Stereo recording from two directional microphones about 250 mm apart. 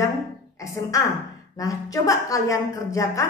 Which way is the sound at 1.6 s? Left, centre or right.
Centre.